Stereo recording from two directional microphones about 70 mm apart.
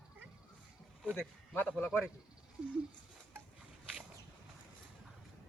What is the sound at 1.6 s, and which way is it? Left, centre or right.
Speech, centre.